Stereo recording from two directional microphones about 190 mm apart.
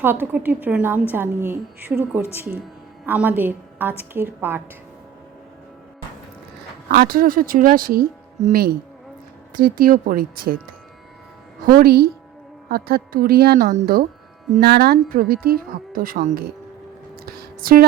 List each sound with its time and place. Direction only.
0.0 s a woman's voice: 10° right (ahead or behind)
6.8 s speech: 50° right (ahead or behind)
9.6 s speech: 50° right (ahead or behind)
11.6 s speech: 50° right (ahead or behind)
17.2 s a sound: 50° right (ahead or behind)